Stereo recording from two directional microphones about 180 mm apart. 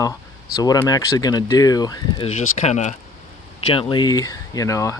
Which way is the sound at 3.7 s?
30° left (ahead or behind).